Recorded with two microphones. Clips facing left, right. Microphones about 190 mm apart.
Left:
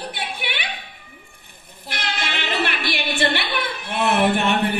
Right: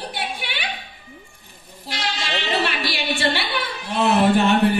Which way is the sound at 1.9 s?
60° left (ahead or behind).